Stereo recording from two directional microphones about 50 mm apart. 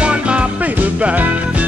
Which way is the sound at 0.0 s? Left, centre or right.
Right.